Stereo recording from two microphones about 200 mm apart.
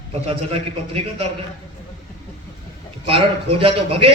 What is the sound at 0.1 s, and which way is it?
Speech, 30° right (ahead or behind).